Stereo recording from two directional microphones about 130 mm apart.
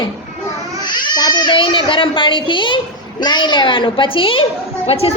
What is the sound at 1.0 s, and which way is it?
A child's voice, 35° left (ahead or behind).